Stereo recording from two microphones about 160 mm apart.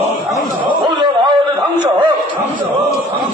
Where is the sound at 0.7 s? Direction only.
30° right (ahead or behind).